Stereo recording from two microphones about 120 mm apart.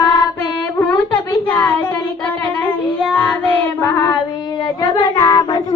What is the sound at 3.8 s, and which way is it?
Child singing, 25° left (ahead or behind).